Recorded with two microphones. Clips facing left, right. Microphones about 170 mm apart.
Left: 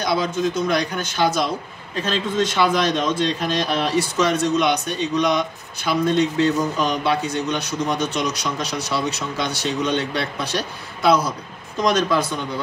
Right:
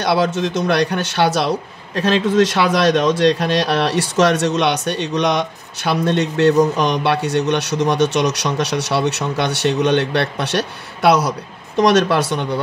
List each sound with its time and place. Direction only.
0.0 s a man's voice: 70° right (ahead or behind)